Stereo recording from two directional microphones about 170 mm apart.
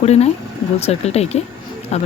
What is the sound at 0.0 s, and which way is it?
Speech, 40° left (ahead or behind).